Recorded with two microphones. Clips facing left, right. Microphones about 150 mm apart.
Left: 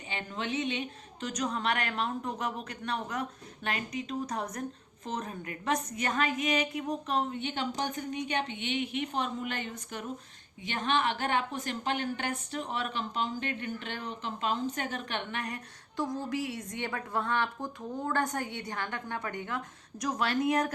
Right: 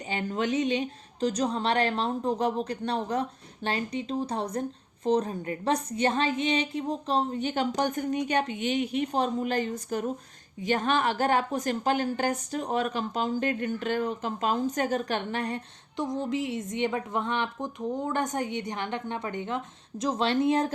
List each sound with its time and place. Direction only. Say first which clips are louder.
0.1 s a woman's voice: right 7 dB; 40° right (ahead or behind)